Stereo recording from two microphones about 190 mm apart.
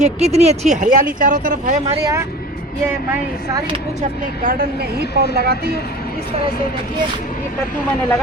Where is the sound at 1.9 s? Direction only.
20° right (ahead or behind).